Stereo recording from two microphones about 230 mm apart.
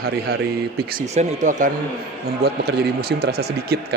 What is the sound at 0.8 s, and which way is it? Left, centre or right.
Speech, right.